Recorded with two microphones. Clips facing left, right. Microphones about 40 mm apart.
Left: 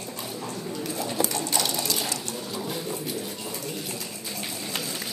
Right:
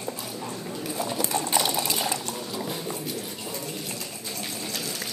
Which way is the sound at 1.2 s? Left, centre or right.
Right.